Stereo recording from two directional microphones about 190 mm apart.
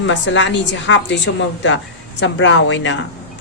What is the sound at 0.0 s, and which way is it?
A woman's voice, 70° left (ahead or behind).